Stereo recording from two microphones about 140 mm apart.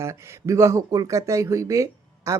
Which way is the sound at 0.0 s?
20° right (ahead or behind).